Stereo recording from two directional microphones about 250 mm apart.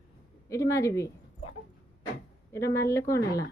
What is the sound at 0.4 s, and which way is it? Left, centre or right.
Speech, centre.